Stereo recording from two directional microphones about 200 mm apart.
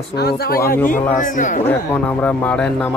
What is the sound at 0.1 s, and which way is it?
Speech, 55° left (ahead or behind).